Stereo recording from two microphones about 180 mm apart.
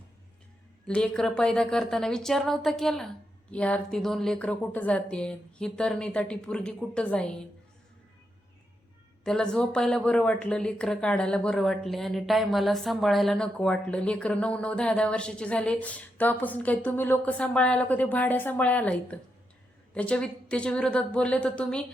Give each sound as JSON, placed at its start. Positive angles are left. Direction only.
{"t": 0.9, "sound": "speech", "side_deg": 5}
{"t": 9.2, "sound": "speech", "side_deg": 5}